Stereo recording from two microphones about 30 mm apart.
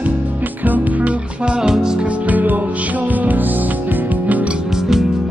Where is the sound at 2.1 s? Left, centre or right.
Right.